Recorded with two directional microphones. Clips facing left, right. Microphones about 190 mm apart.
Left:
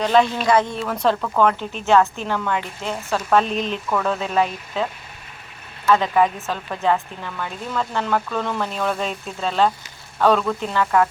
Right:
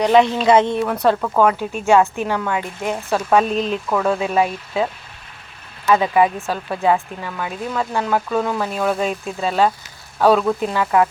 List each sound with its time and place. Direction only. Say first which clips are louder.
0.0 s speech: right 3 dB; 15° right (ahead or behind)
1.0 s speech: right 2 dB; 10° right (ahead or behind)
3.5 s speech: right 4 dB; centre (ahead or behind)
3.8 s speech: right 3 dB; 10° right (ahead or behind)
5.9 s speech: right 2 dB; 10° right (ahead or behind)